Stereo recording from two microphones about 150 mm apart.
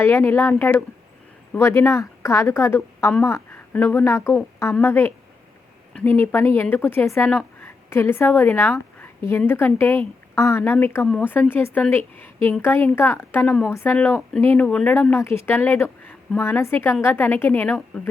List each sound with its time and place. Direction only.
0.0 s a woman's voice: 15° left (ahead or behind)
9.0 s a sound: 15° left (ahead or behind)
9.5 s speech: 15° left (ahead or behind)